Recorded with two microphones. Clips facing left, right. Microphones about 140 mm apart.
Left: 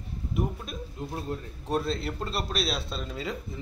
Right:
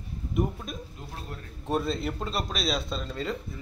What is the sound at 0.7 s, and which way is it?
Speech, centre (ahead or behind).